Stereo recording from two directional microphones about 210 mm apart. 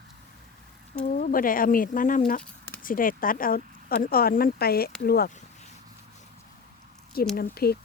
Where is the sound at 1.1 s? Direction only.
40° left (ahead or behind).